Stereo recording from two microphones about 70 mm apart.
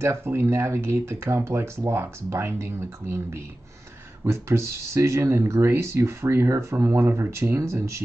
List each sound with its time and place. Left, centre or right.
0.0 s speech: right